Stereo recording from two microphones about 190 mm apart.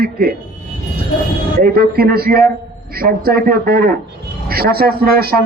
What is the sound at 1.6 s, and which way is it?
A man's voice, 50° right (ahead or behind).